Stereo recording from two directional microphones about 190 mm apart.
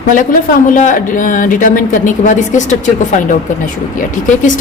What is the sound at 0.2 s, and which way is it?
A woman's voice, 45° left (ahead or behind).